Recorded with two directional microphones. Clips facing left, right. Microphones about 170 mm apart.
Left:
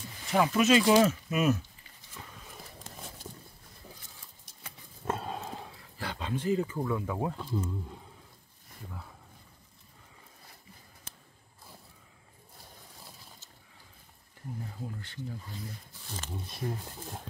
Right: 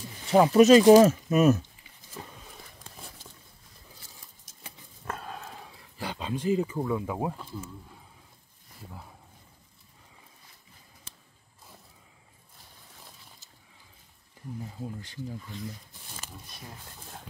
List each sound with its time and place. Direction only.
0.3 s speech: 35° right (ahead or behind)
2.2 s a sound: 35° right (ahead or behind)
5.0 s horse: 25° left (ahead or behind)
5.9 s speech: 15° right (ahead or behind)
15.0 s speech: 15° right (ahead or behind)
16.4 s speech: 25° left (ahead or behind)